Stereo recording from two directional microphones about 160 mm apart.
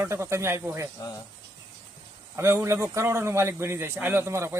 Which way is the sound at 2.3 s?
15° right (ahead or behind).